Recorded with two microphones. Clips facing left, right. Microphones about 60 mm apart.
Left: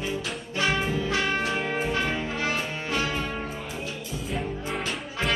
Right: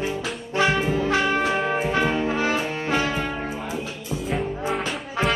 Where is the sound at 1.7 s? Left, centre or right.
Right.